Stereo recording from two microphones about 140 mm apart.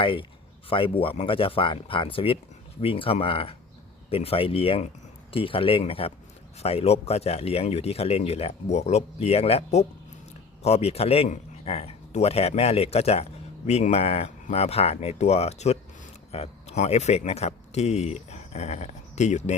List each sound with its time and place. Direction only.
0.0 s speech: 40° left (ahead or behind); by 19.5 s 55° left (ahead or behind)